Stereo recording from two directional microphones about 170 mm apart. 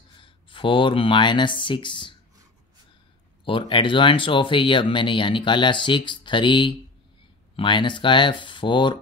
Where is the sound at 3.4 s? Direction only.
30° left (ahead or behind).